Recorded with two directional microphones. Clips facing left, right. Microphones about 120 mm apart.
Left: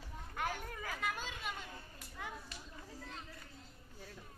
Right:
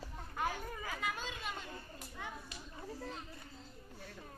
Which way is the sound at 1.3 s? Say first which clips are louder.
Right 1 dB; 5° left (ahead or behind).